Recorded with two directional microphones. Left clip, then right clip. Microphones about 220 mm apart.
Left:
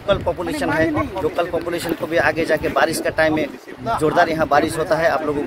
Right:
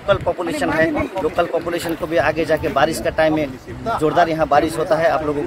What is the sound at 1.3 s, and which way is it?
Speech, 15° left (ahead or behind).